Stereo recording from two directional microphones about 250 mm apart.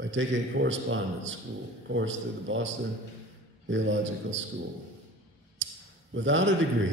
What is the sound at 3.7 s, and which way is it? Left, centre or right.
Speech, right.